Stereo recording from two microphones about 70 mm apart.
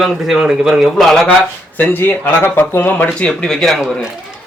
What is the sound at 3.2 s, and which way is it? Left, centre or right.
Speech, centre.